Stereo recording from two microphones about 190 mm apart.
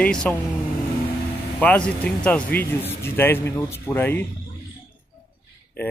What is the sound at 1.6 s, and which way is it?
Speech, 5° left (ahead or behind).